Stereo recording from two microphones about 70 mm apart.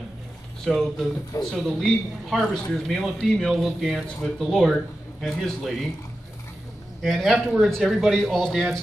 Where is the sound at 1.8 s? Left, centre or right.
Centre.